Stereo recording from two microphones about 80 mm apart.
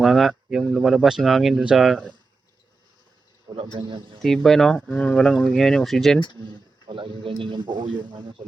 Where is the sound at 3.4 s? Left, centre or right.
Right.